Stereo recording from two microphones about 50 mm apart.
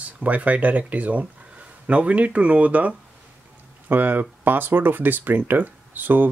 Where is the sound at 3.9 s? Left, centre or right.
Right.